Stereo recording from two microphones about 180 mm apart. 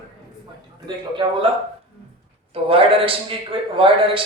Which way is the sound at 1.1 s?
30° right (ahead or behind).